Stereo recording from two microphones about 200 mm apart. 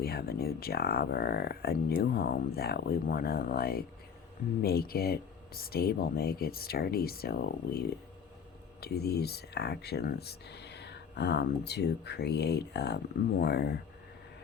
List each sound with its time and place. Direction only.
0.0 s speech: 50° left (ahead or behind)